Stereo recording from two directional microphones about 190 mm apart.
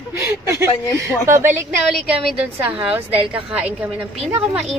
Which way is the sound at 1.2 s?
15° right (ahead or behind).